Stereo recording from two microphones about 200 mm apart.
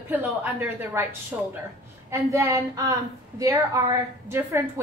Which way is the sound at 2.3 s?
15° right (ahead or behind).